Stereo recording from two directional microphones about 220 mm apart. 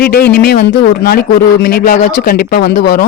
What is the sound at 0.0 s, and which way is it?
A woman's voice, 45° left (ahead or behind).